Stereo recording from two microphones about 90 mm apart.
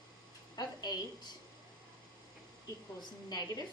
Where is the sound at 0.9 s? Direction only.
55° left (ahead or behind).